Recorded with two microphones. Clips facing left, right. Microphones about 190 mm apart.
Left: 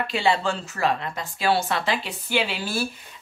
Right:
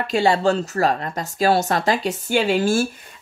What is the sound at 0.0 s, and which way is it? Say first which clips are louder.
A woman's voice: right 5 dB; 40° right (ahead or behind).